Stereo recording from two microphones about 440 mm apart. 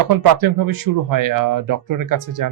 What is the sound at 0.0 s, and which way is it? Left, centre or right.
Speech, right.